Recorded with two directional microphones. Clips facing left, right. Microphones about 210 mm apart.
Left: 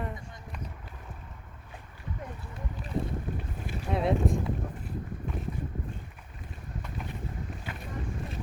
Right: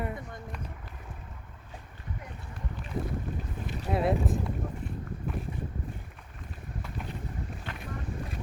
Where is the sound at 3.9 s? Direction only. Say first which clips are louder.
Even; 5° right (ahead or behind).